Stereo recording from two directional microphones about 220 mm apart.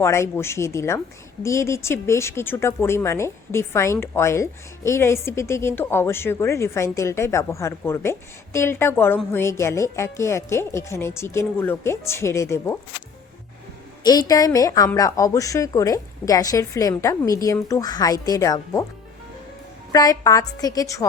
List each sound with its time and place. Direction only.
0.0 s a woman's voice: 10° left (ahead or behind)
14.0 s a woman's voice: 15° left (ahead or behind)
19.9 s a woman's voice: 15° left (ahead or behind)